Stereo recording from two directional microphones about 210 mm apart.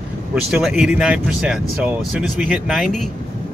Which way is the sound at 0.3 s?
Centre (ahead or behind).